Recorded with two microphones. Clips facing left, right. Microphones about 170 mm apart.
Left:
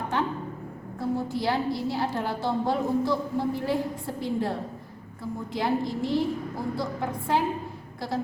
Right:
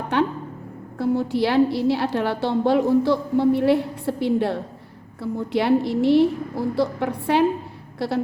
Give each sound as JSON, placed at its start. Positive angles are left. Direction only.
{"t": 0.1, "sound": "a woman's voice", "side_deg": -70}